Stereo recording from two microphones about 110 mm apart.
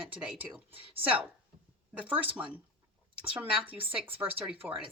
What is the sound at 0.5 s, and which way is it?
Speech, 55° right (ahead or behind).